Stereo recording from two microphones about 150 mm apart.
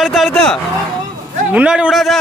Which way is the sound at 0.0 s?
Centre (ahead or behind).